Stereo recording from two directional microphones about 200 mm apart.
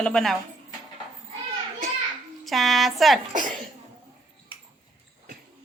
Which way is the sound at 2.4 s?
Centre (ahead or behind).